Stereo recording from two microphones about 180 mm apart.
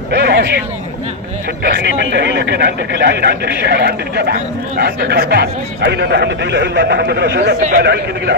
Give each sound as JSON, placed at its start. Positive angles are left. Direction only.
{"t": 0.1, "sound": "speech", "side_deg": -60}
{"t": 1.6, "sound": "speech", "side_deg": -55}
{"t": 2.1, "sound": "speech", "side_deg": -70}